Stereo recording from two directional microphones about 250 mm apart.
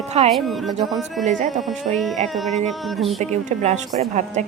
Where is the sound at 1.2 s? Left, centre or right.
Right.